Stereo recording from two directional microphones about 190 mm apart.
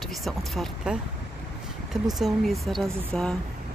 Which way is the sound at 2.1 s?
Centre (ahead or behind).